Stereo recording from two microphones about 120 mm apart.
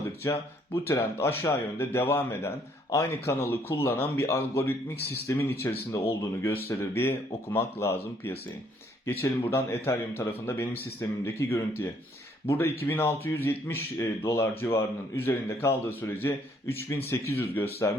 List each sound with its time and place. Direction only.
0.3 s speech: 20° left (ahead or behind)
9.5 s speech: 20° left (ahead or behind)